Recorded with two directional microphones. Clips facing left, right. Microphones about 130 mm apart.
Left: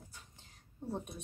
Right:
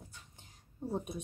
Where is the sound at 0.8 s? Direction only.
10° right (ahead or behind).